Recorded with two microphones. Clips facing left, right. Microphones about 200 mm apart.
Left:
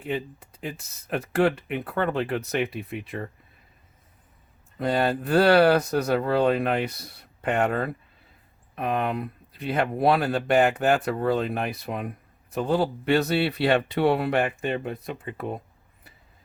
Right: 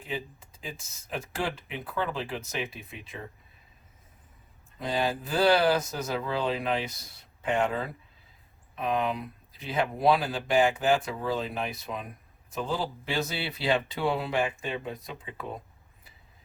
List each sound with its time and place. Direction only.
0.0 s speech: 60° left (ahead or behind)
4.8 s speech: 60° left (ahead or behind)